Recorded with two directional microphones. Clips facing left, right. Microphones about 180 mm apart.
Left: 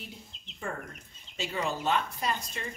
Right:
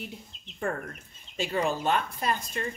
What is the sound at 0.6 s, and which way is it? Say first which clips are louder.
A woman's voice: right 6 dB; 55° right (ahead or behind).